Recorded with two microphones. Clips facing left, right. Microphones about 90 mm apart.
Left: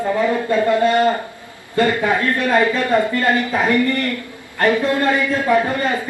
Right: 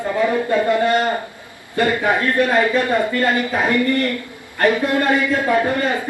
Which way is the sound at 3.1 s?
25° left (ahead or behind).